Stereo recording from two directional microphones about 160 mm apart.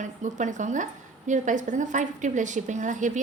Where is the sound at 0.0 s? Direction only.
50° right (ahead or behind).